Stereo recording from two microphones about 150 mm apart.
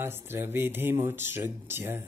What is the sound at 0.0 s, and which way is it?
Speech, 15° right (ahead or behind).